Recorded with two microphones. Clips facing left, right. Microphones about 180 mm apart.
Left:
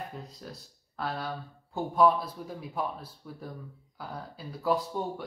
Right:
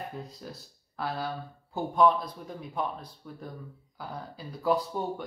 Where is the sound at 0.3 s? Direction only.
Centre (ahead or behind).